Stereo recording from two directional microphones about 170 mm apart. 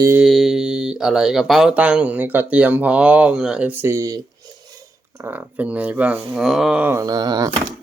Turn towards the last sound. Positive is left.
turn(degrees=-25)  # may be behind; listen again after turning